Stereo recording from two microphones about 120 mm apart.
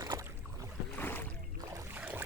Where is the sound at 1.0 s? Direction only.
15° left (ahead or behind).